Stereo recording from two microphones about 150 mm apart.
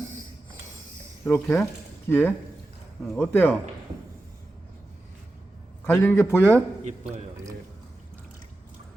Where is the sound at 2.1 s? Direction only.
15° left (ahead or behind).